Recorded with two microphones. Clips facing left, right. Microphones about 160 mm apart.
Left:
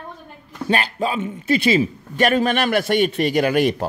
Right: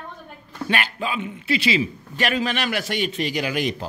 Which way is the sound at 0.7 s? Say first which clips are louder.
Left 5 dB; 40° left (ahead or behind).